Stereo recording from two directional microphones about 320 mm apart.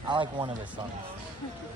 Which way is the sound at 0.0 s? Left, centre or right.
Centre.